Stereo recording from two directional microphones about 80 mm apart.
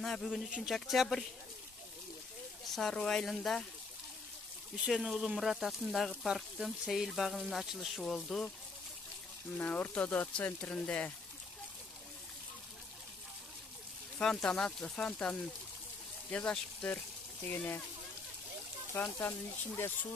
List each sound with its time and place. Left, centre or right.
0.0 s speech: centre
2.7 s speech: centre
4.7 s speech: centre
9.6 s speech: left
14.1 s speech: centre
19.1 s speech: left